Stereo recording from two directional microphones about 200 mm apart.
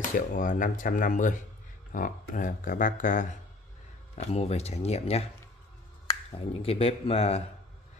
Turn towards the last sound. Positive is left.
turn(degrees=30)  # may be behind; listen again after turning